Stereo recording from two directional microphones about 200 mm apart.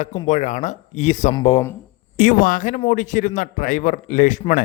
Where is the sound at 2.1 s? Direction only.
40° left (ahead or behind).